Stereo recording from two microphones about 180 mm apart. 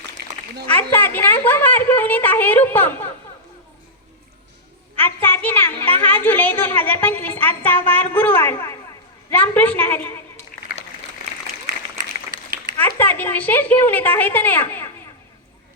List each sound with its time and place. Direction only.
0.7 s a woman's voice: 10° left (ahead or behind)
4.9 s a woman's voice: 10° left (ahead or behind)
10.5 s a sound: 50° left (ahead or behind)
13.0 s a woman's voice: 10° left (ahead or behind)